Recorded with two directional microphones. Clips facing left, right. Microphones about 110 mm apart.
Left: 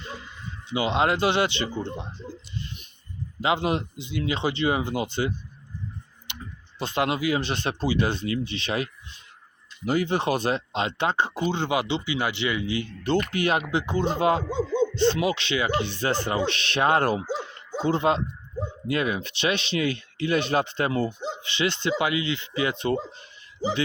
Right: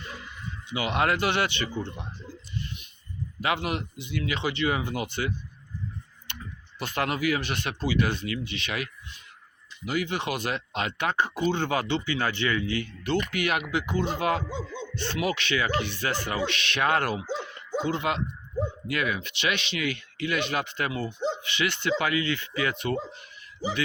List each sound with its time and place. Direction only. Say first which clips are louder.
0.0 s a sound: left 2 dB; 25° left (ahead or behind)
0.7 s speech: left 3 dB; 25° left (ahead or behind)
3.4 s speech: left 4 dB; 25° left (ahead or behind)
6.7 s speech: left 3 dB; 25° left (ahead or behind)
13.0 s speech: left 4 dB; 30° left (ahead or behind)
14.5 s a sound: left 9 dB; 30° left (ahead or behind)
14.9 s speech: left 6 dB; 20° left (ahead or behind)
17.3 s dog: right 1 dB; 30° left (ahead or behind)
18.9 s speech: left 3 dB; 30° left (ahead or behind)
21.2 s dog: right 4 dB; 5° left (ahead or behind)
21.4 s speech: left 2 dB; 30° left (ahead or behind)